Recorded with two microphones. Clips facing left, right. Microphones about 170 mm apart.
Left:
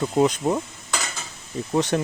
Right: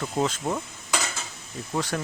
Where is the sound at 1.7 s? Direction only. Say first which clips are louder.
Left 6 dB; 20° left (ahead or behind).